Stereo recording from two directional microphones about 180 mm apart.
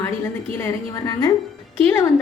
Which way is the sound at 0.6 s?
15° left (ahead or behind).